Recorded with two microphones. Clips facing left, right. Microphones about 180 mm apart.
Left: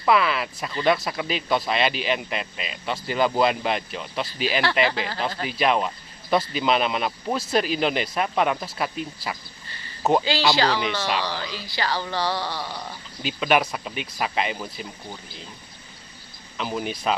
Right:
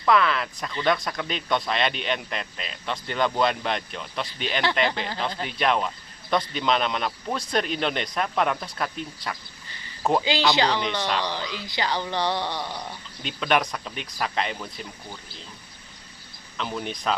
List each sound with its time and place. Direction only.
0.0 s speech: 5° left (ahead or behind)
10.5 s a woman's voice: 20° right (ahead or behind)
10.8 s speech: 5° left (ahead or behind)
11.5 s a woman's voice: 20° right (ahead or behind)
13.2 s speech: 5° left (ahead or behind)
16.6 s speech: 5° left (ahead or behind)